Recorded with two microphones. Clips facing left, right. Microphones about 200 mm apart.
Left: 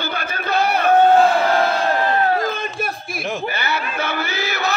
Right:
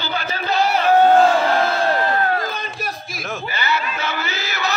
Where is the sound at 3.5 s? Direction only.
55° left (ahead or behind).